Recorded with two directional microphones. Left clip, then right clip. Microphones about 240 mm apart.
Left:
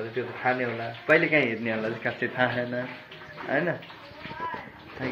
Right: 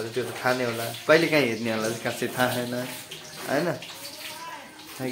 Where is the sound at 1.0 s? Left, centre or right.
Right.